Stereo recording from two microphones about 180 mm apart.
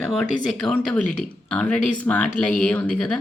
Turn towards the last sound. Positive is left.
turn(degrees=5)  # may be behind; listen again after turning